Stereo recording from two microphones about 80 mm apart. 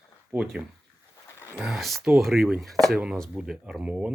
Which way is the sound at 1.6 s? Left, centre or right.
Centre.